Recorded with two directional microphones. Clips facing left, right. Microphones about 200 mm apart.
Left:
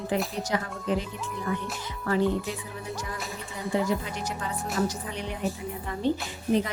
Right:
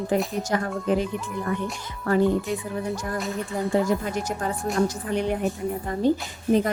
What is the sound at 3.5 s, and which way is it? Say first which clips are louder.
A woman's voice: right 4 dB; 50° right (ahead or behind).